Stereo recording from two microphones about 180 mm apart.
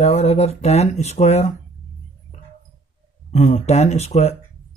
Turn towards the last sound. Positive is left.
turn(degrees=40)  # may be behind; listen again after turning